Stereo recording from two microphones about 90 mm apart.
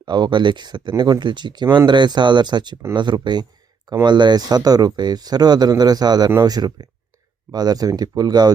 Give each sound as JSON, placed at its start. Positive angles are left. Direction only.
{"t": 0.0, "sound": "speech", "side_deg": -55}